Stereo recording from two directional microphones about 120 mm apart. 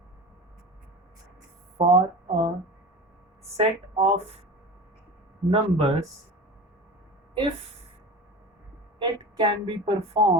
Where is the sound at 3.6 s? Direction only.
55° right (ahead or behind).